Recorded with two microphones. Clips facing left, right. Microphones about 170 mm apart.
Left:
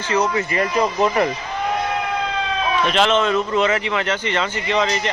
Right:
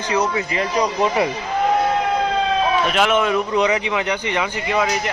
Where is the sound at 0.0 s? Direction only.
10° right (ahead or behind).